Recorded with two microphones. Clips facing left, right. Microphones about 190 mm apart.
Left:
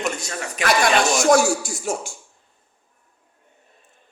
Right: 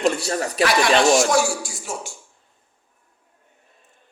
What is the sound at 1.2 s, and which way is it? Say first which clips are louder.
Speech: left 3 dB; 45° left (ahead or behind).